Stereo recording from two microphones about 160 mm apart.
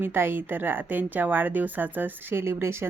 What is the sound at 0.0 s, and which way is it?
A woman's voice, 15° right (ahead or behind).